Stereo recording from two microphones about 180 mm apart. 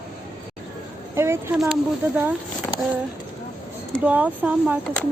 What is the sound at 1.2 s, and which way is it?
Speech, 15° right (ahead or behind).